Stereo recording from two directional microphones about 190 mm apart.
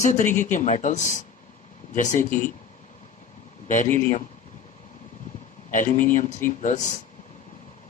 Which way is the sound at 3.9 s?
45° left (ahead or behind).